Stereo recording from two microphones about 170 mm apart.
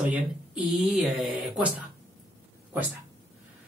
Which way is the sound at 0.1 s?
5° right (ahead or behind).